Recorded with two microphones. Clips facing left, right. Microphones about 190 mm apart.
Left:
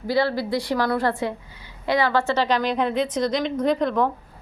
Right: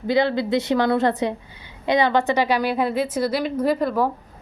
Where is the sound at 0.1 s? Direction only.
20° right (ahead or behind).